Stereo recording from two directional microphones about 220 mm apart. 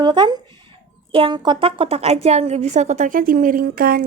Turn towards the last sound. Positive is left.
turn(degrees=-40)  # may be behind; listen again after turning